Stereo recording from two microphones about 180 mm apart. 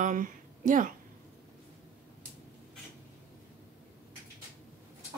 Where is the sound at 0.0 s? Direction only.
45° right (ahead or behind).